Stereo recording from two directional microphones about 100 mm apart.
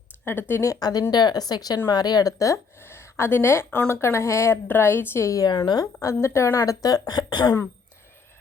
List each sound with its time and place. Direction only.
0.3 s a woman's voice: 20° left (ahead or behind)
0.7 s a woman's voice: 40° left (ahead or behind)
5.5 s speech: 50° left (ahead or behind)